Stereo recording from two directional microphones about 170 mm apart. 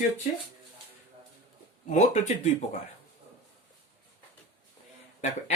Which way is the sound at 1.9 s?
45° left (ahead or behind).